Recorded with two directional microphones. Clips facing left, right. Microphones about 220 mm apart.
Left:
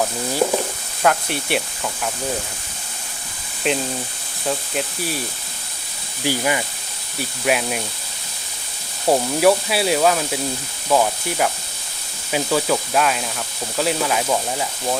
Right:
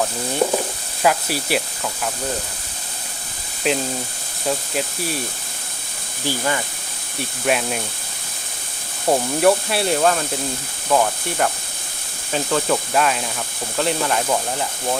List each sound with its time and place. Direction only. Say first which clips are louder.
0.0 s speech: even; 5° left (ahead or behind)
3.6 s speech: even; centre (ahead or behind)
6.2 s speech: left 2 dB; 15° left (ahead or behind)
7.2 s speech: even; 5° left (ahead or behind)
9.0 s speech: left 1 dB; 5° left (ahead or behind)